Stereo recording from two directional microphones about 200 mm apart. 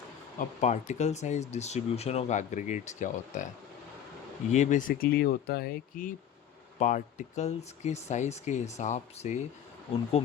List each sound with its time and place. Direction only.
0.3 s speech: 35° left (ahead or behind)
4.5 s speech: 35° left (ahead or behind)